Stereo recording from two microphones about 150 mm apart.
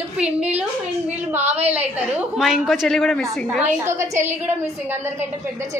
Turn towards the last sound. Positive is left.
turn(degrees=-15)  # may be behind; listen again after turning